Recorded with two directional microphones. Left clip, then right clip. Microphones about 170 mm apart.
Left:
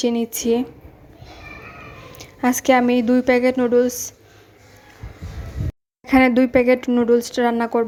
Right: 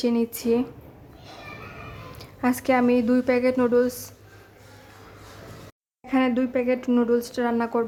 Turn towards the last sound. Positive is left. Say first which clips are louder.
# left 5 dB
turn(degrees=20)  # may be behind; listen again after turning